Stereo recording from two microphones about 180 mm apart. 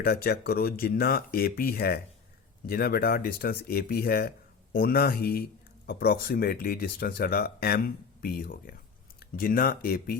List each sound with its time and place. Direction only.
0.0 s speech: 60° left (ahead or behind)